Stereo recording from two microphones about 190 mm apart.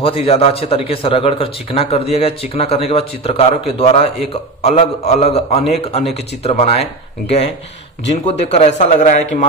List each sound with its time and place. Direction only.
0.0 s a man's voice: 30° left (ahead or behind)